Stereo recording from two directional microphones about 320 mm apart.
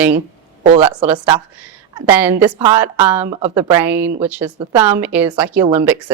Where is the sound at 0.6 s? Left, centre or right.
Centre.